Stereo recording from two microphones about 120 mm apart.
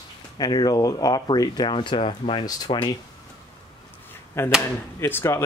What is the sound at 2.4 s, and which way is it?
Speech, 35° left (ahead or behind).